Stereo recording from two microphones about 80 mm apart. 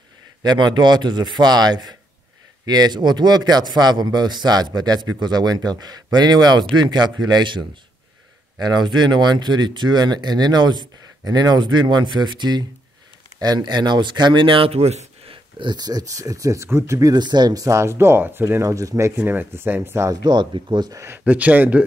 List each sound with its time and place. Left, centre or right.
0.4 s speech: right
15.6 s speech: right
17.1 s speech: right
19.1 s speech: right
20.1 s speech: right
21.2 s speech: centre